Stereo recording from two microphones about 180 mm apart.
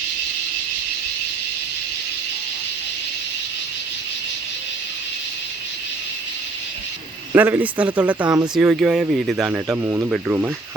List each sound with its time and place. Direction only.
7.3 s speech: 10° right (ahead or behind)